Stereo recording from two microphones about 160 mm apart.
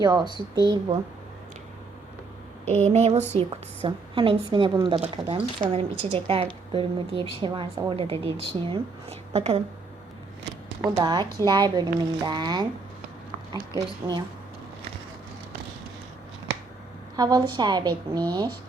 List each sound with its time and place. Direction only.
0.0 s speech: 25° right (ahead or behind)
2.6 s a sound: 10° left (ahead or behind)
2.9 s a woman's voice: 45° right (ahead or behind)
10.9 s speech: 30° right (ahead or behind)
17.2 s speech: 25° right (ahead or behind)